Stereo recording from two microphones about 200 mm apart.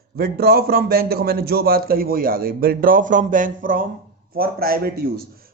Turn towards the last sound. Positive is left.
turn(degrees=-50)  # may be behind; listen again after turning